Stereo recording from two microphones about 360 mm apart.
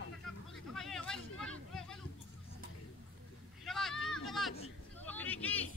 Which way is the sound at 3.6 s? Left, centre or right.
Centre.